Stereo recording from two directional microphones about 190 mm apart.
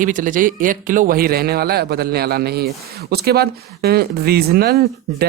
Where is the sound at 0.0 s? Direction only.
45° right (ahead or behind).